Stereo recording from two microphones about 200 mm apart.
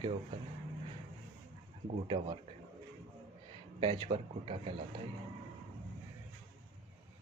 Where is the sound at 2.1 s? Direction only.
20° right (ahead or behind).